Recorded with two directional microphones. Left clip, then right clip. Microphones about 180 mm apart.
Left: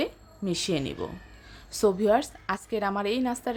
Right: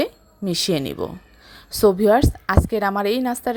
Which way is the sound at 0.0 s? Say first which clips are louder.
Right 7 dB; 35° right (ahead or behind).